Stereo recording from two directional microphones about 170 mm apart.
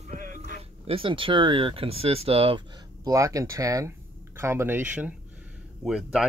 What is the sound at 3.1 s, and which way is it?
Speech, 20° right (ahead or behind).